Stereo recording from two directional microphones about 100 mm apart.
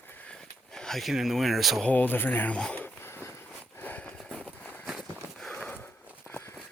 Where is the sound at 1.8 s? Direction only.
15° left (ahead or behind).